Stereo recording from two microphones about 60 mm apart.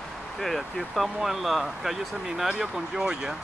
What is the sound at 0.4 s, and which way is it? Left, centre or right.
Speech, centre.